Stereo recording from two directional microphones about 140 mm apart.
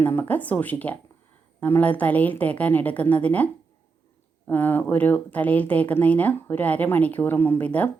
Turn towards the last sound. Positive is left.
turn(degrees=10)  # may be behind; listen again after turning